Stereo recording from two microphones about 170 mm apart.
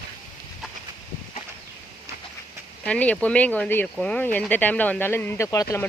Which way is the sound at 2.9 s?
10° left (ahead or behind).